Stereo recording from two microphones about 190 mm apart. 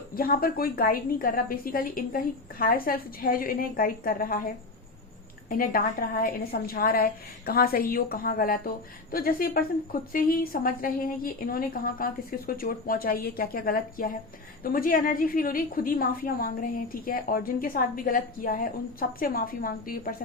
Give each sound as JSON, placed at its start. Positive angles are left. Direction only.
{"t": 0.2, "sound": "a woman's voice", "side_deg": 50}